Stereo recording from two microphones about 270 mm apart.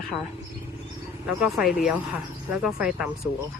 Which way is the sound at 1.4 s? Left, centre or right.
Centre.